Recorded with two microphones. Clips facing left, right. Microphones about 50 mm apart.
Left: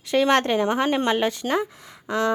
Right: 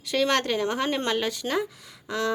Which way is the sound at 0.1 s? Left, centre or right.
Left.